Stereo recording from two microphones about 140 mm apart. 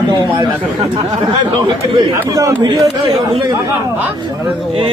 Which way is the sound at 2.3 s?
25° right (ahead or behind).